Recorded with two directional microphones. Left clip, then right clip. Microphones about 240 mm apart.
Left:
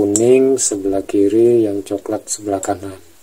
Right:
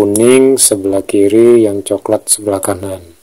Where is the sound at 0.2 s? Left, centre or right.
Right.